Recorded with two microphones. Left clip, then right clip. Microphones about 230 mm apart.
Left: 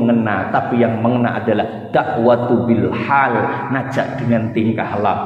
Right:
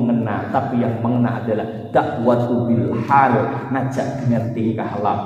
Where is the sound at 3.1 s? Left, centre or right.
Left.